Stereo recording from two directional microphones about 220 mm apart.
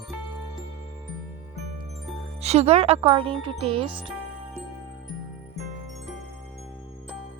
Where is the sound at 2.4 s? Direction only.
30° right (ahead or behind).